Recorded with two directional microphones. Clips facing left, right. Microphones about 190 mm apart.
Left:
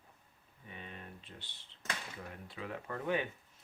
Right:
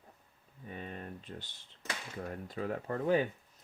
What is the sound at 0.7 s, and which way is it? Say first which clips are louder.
Speech: right 6 dB; 45° right (ahead or behind).